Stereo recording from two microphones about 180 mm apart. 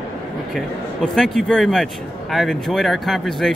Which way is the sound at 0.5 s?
5° left (ahead or behind).